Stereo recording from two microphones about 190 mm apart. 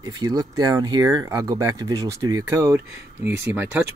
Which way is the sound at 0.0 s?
20° right (ahead or behind).